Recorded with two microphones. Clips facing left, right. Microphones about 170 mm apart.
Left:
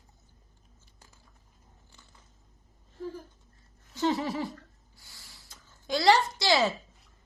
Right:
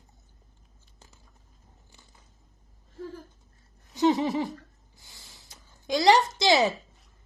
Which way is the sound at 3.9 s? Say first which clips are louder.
Right 5 dB; 20° right (ahead or behind).